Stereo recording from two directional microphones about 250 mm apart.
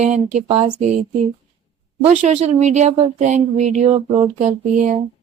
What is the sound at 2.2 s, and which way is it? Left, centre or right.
Speech, right.